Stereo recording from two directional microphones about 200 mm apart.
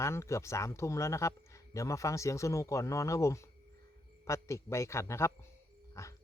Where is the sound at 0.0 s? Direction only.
15° left (ahead or behind).